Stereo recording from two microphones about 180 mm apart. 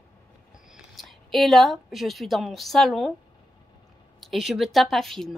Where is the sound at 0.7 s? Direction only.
Centre (ahead or behind).